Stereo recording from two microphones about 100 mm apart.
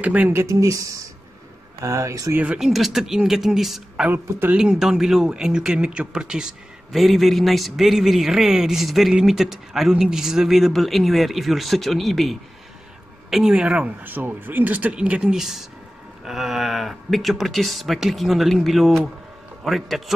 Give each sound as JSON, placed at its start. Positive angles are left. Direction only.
{"t": 0.0, "sound": "speech", "side_deg": -15}
{"t": 2.3, "sound": "speech", "side_deg": -10}
{"t": 4.1, "sound": "speech", "side_deg": -20}
{"t": 4.6, "sound": "speech", "side_deg": -5}